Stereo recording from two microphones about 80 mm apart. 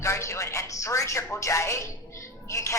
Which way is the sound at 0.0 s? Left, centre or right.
Left.